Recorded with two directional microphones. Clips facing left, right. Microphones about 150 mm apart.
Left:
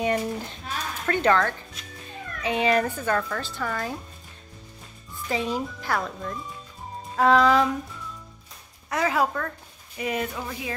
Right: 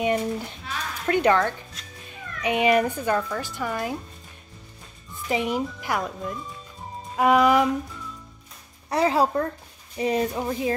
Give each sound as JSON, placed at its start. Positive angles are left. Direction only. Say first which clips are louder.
{"t": 0.0, "sound": "a sound", "louder": "right 1 dB", "side_deg": -15}
{"t": 1.0, "sound": "speech", "louder": "right 2 dB", "side_deg": -15}
{"t": 5.3, "sound": "speech", "louder": "right 2 dB", "side_deg": -15}
{"t": 8.9, "sound": "speech", "louder": "right 3 dB", "side_deg": -30}